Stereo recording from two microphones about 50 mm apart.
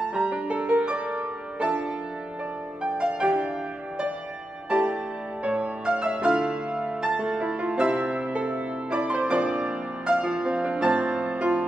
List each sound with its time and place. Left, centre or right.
0.1 s music: right
5.4 s music: right